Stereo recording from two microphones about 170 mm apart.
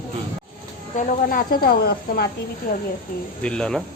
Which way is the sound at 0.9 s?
55° left (ahead or behind).